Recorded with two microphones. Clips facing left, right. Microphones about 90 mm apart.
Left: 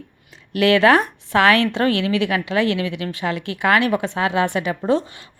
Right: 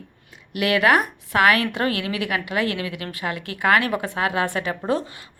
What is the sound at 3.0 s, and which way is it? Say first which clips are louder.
Speech: left 6 dB; 35° right (ahead or behind).